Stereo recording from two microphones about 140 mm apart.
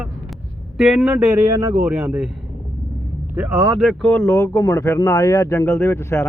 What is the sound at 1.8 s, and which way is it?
Speech, 5° right (ahead or behind).